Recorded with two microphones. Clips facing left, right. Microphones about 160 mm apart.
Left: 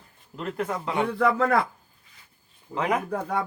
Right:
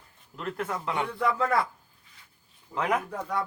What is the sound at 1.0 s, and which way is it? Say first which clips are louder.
Speech: left 6 dB; 30° left (ahead or behind).